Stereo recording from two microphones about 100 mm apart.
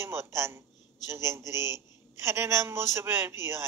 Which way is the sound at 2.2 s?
25° right (ahead or behind).